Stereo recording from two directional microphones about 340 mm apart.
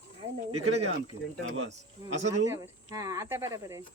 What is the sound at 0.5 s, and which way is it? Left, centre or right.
Speech, right.